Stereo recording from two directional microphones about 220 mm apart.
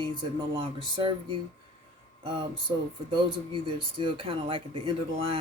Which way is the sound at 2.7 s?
20° right (ahead or behind).